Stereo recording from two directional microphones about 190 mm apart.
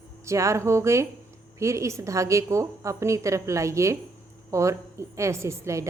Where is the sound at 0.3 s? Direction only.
15° right (ahead or behind).